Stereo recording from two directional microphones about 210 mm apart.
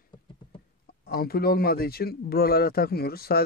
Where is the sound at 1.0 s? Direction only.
45° left (ahead or behind).